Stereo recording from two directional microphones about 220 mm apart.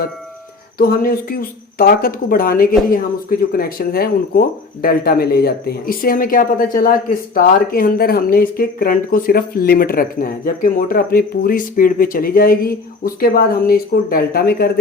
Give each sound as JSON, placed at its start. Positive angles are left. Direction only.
{"t": 0.8, "sound": "speech", "side_deg": 40}